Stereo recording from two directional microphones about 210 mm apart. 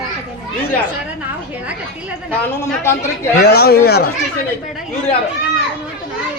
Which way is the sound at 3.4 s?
50° left (ahead or behind).